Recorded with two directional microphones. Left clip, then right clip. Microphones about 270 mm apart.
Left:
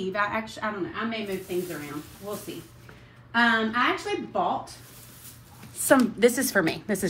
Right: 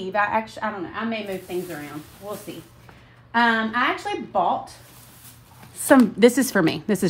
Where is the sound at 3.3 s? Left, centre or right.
Right.